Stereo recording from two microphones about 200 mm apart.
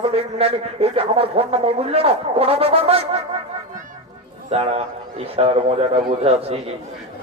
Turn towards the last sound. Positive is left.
turn(degrees=-30)  # may be behind; listen again after turning